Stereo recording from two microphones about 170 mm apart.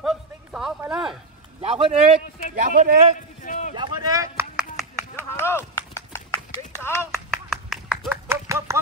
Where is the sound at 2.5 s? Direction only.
50° right (ahead or behind).